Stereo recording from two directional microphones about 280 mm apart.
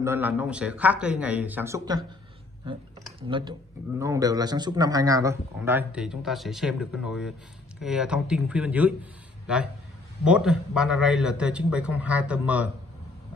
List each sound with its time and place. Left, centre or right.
0.0 s a man's voice: centre
3.3 s a man's voice: centre
10.2 s a man's voice: centre